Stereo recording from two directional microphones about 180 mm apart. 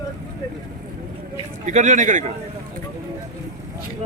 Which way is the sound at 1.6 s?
40° right (ahead or behind).